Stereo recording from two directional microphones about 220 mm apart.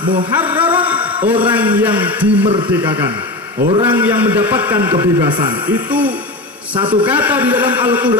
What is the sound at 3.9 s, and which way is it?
A man's voice, 10° right (ahead or behind).